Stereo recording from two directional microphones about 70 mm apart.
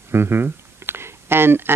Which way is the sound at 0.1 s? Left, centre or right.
Right.